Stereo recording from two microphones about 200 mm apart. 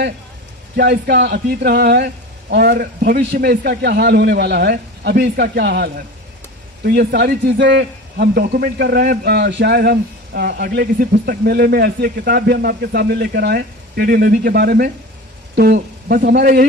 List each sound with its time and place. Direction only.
0.8 s speech: 50° right (ahead or behind)